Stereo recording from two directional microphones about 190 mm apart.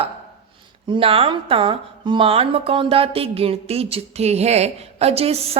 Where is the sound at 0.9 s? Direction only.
30° right (ahead or behind).